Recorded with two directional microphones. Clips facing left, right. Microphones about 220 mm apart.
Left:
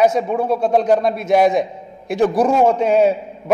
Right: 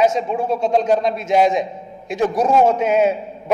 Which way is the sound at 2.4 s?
30° left (ahead or behind).